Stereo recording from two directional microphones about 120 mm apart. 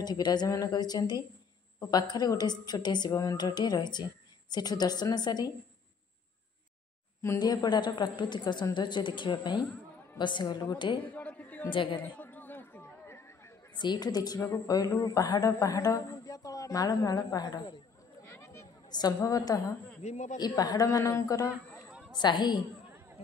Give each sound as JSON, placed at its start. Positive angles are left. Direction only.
{"t": 0.0, "sound": "a woman's voice", "side_deg": 35}
{"t": 7.2, "sound": "a woman's voice", "side_deg": 30}
{"t": 11.1, "sound": "a sound", "side_deg": 15}
{"t": 11.7, "sound": "a woman's voice", "side_deg": 45}
{"t": 12.0, "sound": "chatter", "side_deg": 15}
{"t": 13.7, "sound": "a woman's voice", "side_deg": 35}
{"t": 18.2, "sound": "a sound", "side_deg": 20}
{"t": 18.9, "sound": "a woman's voice", "side_deg": 35}
{"t": 20.0, "sound": "a man's voice", "side_deg": 80}
{"t": 20.3, "sound": "a woman's voice", "side_deg": 35}
{"t": 22.1, "sound": "a woman's voice", "side_deg": 40}